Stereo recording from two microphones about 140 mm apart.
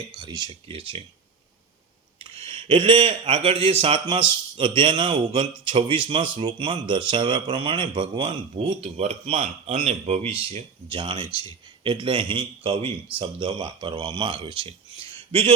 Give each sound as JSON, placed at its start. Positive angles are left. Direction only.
{"t": 0.2, "sound": "a man's voice", "side_deg": -30}
{"t": 2.4, "sound": "a man's voice", "side_deg": -40}